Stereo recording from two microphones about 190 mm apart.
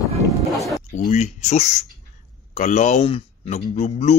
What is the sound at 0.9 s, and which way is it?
Speech, 40° left (ahead or behind).